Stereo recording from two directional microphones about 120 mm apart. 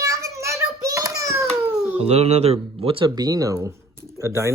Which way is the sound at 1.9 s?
60° right (ahead or behind).